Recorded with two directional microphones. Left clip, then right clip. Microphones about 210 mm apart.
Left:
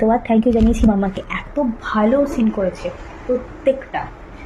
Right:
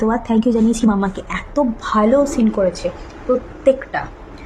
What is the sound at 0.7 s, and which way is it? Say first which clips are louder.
A woman's voice: even; 20° right (ahead or behind).